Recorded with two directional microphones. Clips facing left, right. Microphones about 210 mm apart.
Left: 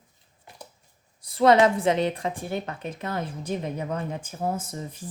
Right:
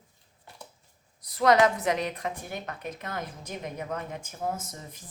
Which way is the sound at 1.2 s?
30° left (ahead or behind).